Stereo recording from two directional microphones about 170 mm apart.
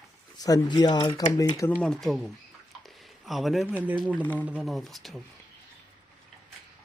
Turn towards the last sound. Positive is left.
turn(degrees=0)  # may be behind; listen again after turning